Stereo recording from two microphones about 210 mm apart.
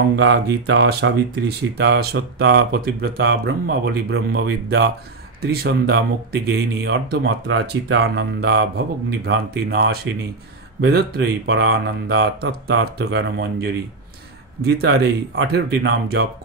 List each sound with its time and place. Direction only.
0.1 s speech: 55° right (ahead or behind)